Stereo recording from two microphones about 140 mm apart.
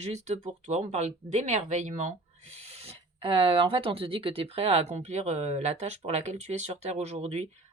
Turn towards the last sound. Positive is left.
turn(degrees=-50)  # may be behind; listen again after turning